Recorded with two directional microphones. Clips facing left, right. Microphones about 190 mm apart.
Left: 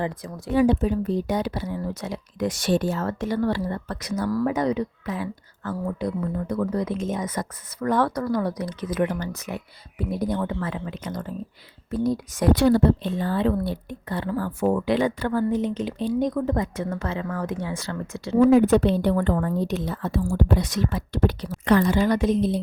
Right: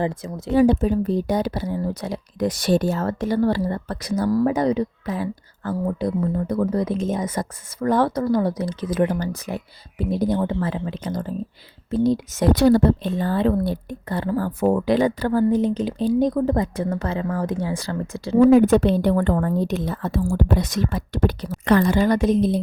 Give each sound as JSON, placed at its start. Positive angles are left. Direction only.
{"t": 0.0, "sound": "speech", "side_deg": -25}
{"t": 0.5, "sound": "speech", "side_deg": -35}
{"t": 12.5, "sound": "speech", "side_deg": -40}
{"t": 18.5, "sound": "a woman's voice", "side_deg": -45}